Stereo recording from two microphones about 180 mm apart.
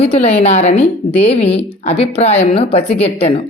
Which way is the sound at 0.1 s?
35° left (ahead or behind).